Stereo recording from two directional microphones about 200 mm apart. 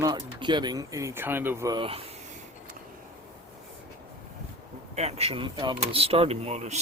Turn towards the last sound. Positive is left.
turn(degrees=-35)  # may be behind; listen again after turning